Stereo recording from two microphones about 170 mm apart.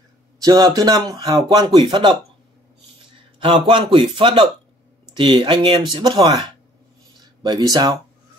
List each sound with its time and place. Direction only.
0.4 s a man's voice: 20° right (ahead or behind)
3.4 s a man's voice: 30° right (ahead or behind)
7.4 s a man's voice: 25° right (ahead or behind)